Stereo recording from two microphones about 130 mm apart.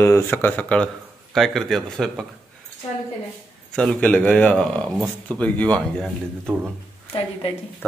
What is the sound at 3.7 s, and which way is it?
Speech, 5° left (ahead or behind).